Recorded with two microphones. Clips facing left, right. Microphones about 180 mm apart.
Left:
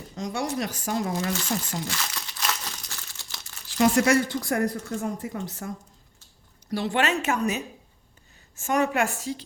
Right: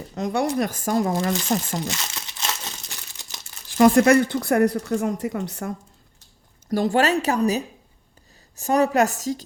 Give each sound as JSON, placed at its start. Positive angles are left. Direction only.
{"t": 0.2, "sound": "speech", "side_deg": -55}
{"t": 1.9, "sound": "crumpling", "side_deg": -20}
{"t": 3.7, "sound": "speech", "side_deg": -55}
{"t": 6.7, "sound": "speech", "side_deg": -45}